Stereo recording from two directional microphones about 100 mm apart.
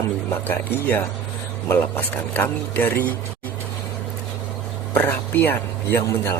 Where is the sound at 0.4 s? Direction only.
20° left (ahead or behind).